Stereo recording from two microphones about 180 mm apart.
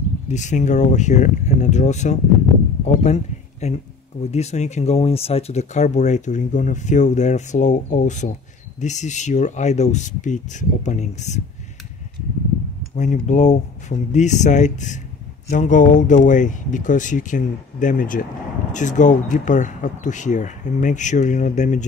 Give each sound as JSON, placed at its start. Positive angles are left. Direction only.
{"t": 0.3, "sound": "speech", "side_deg": 40}
{"t": 12.9, "sound": "speech", "side_deg": 40}